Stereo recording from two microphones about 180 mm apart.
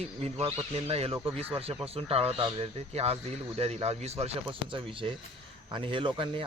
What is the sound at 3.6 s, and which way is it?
Speech, 35° right (ahead or behind).